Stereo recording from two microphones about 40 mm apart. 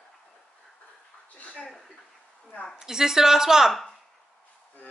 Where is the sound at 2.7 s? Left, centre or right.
Centre.